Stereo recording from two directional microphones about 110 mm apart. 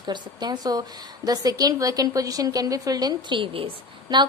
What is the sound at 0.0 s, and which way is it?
A woman's voice, 40° right (ahead or behind).